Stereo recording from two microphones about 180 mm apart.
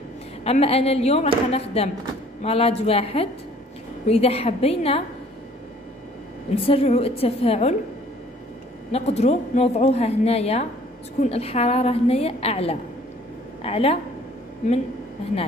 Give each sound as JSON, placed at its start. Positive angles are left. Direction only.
{"t": 0.4, "sound": "speech", "side_deg": 35}
{"t": 6.7, "sound": "speech", "side_deg": 35}
{"t": 8.9, "sound": "a woman's voice", "side_deg": 35}